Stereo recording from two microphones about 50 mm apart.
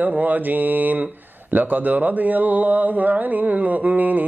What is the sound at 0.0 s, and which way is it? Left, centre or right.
Speech, right.